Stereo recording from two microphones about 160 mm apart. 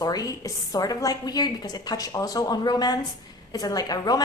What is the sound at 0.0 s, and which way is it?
A woman's voice, 25° left (ahead or behind).